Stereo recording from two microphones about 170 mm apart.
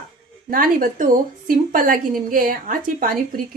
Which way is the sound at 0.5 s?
55° right (ahead or behind).